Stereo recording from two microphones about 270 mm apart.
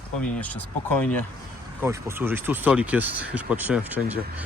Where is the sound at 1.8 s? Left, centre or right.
Centre.